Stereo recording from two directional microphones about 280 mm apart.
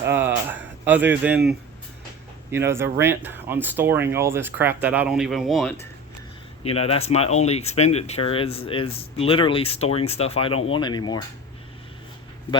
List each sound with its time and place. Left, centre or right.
0.1 s a sound: centre
2.5 s speech: centre
6.7 s speech: left